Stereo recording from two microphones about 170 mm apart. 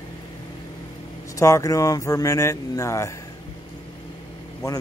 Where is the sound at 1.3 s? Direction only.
20° left (ahead or behind).